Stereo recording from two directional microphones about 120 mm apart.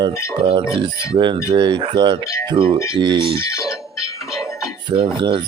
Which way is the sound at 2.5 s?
45° right (ahead or behind).